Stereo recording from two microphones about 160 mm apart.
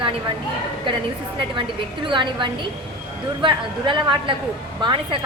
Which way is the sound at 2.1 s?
30° right (ahead or behind).